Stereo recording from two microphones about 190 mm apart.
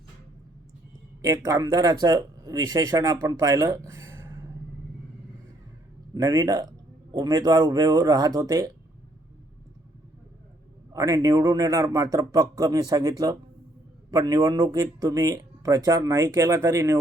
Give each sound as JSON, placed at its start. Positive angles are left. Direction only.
{"t": 1.2, "sound": "speech", "side_deg": -15}
{"t": 3.8, "sound": "a sound", "side_deg": -15}
{"t": 6.1, "sound": "speech", "side_deg": -20}
{"t": 10.9, "sound": "speech", "side_deg": -15}